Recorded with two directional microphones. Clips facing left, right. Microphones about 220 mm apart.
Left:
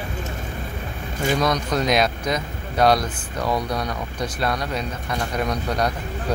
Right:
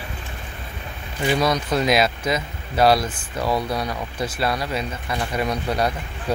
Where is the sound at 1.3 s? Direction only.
5° right (ahead or behind).